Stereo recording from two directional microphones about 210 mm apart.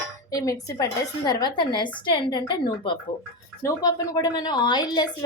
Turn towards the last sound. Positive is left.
turn(degrees=20)  # may be behind; listen again after turning